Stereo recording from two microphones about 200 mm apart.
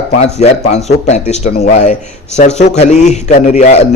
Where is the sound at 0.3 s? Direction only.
35° left (ahead or behind).